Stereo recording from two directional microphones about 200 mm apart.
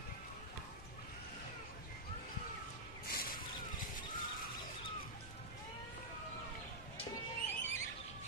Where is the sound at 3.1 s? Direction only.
50° left (ahead or behind).